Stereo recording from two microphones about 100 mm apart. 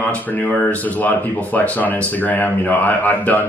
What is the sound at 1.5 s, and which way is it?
A man's voice, 15° left (ahead or behind).